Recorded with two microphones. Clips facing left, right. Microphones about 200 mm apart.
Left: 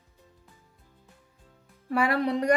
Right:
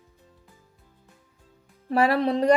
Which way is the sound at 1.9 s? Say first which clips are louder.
Right 4 dB; 30° right (ahead or behind).